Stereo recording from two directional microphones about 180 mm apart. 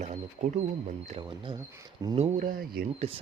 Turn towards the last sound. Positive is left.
turn(degrees=-35)  # may be behind; listen again after turning